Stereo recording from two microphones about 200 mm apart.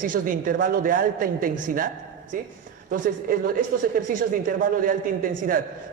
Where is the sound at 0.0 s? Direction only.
40° right (ahead or behind).